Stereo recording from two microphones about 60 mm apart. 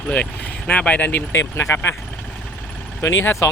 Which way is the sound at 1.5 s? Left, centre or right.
Left.